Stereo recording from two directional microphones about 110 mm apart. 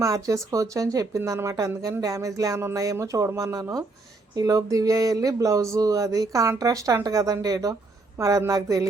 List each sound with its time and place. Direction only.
0.0 s speech: 30° right (ahead or behind)